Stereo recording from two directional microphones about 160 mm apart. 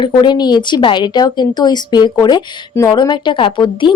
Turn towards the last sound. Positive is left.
turn(degrees=30)  # may be behind; listen again after turning